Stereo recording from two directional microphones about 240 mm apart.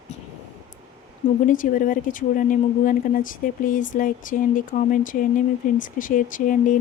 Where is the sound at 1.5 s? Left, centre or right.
Left.